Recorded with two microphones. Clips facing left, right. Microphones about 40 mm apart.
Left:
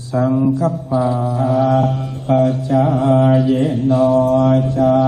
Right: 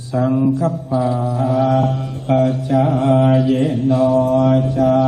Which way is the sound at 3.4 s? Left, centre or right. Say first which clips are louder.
Left 1 dB; centre.